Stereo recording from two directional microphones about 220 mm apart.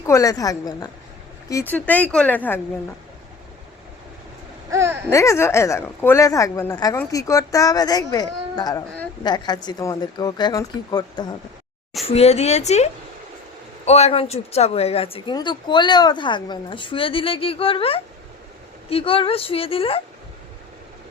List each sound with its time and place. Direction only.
0.0 s a woman's voice: 15° left (ahead or behind)
1.7 s a woman's voice: 5° left (ahead or behind)
4.7 s babbling: 10° right (ahead or behind)
5.1 s a woman's voice: 15° left (ahead or behind)
12.0 s speech: 30° left (ahead or behind)